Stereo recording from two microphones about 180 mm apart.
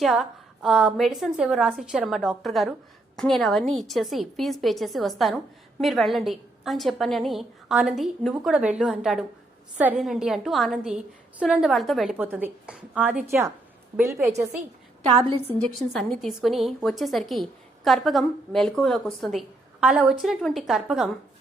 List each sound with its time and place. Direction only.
0.0 s a woman's voice: centre (ahead or behind)
15.3 s a woman's voice: 35° right (ahead or behind)
15.7 s a woman's voice: centre (ahead or behind)